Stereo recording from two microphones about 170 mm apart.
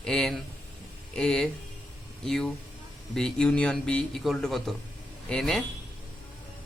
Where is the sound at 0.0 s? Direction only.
5° left (ahead or behind).